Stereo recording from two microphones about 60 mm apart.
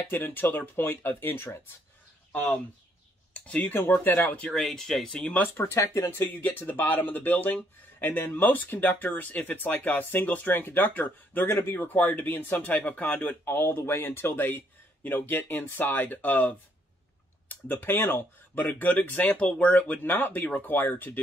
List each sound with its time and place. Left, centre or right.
0.1 s speech: left
3.3 s speech: left
4.0 s speech: left
4.5 s speech: centre
5.6 s speech: left
6.1 s speech: left